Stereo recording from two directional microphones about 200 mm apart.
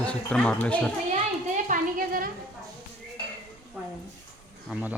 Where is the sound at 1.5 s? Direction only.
40° right (ahead or behind).